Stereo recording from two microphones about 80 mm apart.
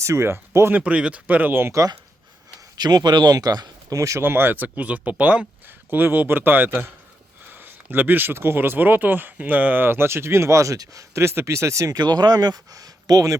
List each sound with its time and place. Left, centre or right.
0.0 s speech: right
0.7 s speech: centre
2.7 s speech: right
3.9 s speech: right
4.2 s speech: right
11.9 s speech: right